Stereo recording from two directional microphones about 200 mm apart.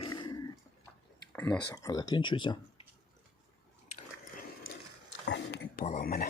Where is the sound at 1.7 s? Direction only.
15° left (ahead or behind).